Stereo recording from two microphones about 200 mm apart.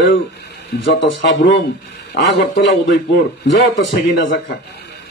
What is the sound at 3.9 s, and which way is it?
Speech, 55° left (ahead or behind).